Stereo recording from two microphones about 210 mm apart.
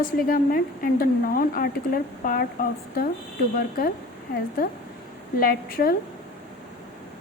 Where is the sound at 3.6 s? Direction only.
45° left (ahead or behind).